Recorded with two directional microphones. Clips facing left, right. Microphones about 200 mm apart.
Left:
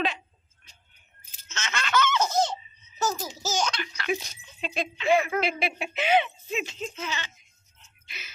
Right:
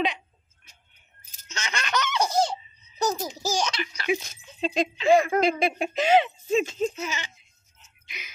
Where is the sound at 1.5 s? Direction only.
15° right (ahead or behind).